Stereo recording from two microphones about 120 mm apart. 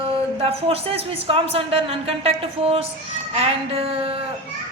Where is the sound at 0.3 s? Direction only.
55° right (ahead or behind).